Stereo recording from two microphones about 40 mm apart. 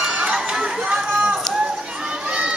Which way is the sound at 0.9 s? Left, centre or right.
Right.